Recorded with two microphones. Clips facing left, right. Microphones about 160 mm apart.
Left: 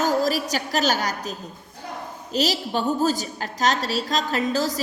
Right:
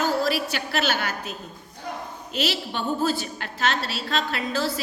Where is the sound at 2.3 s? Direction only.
40° left (ahead or behind).